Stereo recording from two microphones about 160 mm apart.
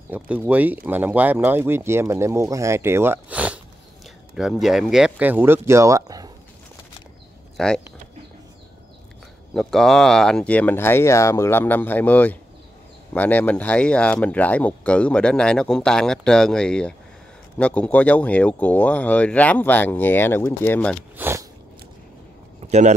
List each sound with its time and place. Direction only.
0.1 s speech: 10° right (ahead or behind)
7.5 s speech: 5° left (ahead or behind)
9.5 s speech: centre (ahead or behind)
21.2 s biting: 15° right (ahead or behind)
22.7 s speech: 45° right (ahead or behind)